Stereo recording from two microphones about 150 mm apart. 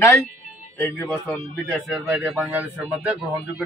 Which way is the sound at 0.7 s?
20° left (ahead or behind).